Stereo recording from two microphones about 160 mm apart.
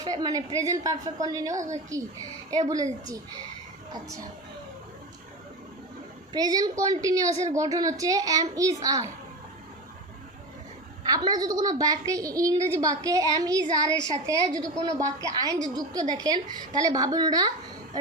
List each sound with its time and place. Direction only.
0.0 s a woman's voice: 25° right (ahead or behind)
6.3 s a woman's voice: 25° right (ahead or behind)
11.0 s a woman's voice: 25° right (ahead or behind)